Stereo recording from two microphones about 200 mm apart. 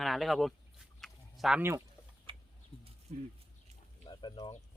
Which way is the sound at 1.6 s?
10° right (ahead or behind).